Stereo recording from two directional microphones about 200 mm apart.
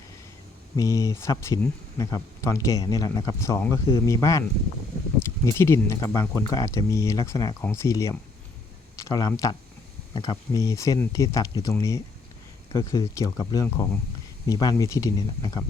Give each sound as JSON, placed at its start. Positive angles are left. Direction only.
{"t": 0.8, "sound": "speech", "side_deg": 15}